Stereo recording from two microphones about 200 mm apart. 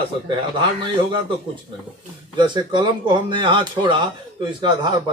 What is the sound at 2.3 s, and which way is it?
Speech, 20° right (ahead or behind).